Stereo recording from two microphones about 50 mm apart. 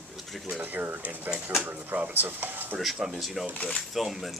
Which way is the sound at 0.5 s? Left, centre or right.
Right.